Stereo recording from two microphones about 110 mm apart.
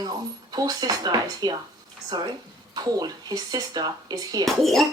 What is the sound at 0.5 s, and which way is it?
Speech, 35° right (ahead or behind).